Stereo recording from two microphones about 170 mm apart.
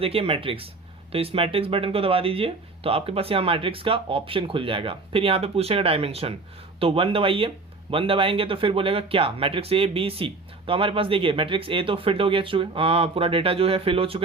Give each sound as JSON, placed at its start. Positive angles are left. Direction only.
{"t": 0.0, "sound": "speech", "side_deg": -35}